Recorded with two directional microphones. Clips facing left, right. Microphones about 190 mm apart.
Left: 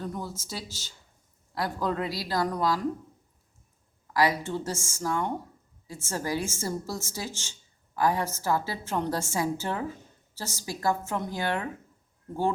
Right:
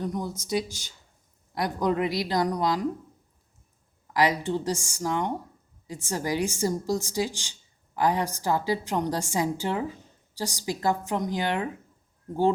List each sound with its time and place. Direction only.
0.0 s a woman's voice: 15° right (ahead or behind)
4.0 s a woman's voice: 20° right (ahead or behind)